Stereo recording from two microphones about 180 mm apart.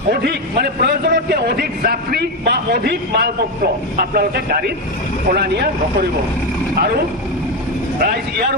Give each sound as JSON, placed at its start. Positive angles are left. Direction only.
{"t": 0.1, "sound": "a man's voice", "side_deg": -60}
{"t": 6.7, "sound": "a man's voice", "side_deg": -60}